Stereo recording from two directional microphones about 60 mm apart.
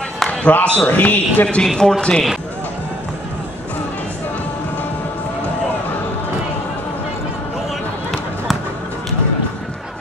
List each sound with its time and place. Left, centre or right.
0.3 s a sound: left
0.7 s speech: left
1.8 s speech: centre